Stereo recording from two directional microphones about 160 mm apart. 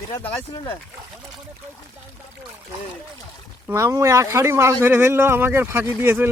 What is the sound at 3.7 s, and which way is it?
Speech, 20° right (ahead or behind).